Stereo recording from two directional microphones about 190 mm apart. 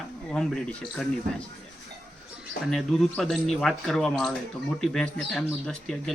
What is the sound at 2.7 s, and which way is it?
Speech, centre (ahead or behind).